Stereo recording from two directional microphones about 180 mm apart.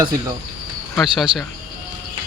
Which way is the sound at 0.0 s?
20° right (ahead or behind).